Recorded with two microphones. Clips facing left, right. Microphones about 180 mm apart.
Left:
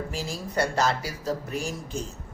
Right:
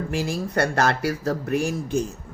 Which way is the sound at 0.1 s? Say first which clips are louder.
Right 7 dB; 60° right (ahead or behind).